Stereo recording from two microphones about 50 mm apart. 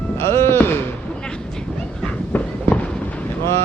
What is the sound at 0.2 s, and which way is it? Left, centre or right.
Speech, left.